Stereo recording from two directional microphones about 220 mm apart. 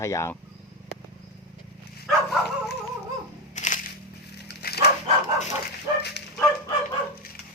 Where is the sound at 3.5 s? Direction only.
35° left (ahead or behind).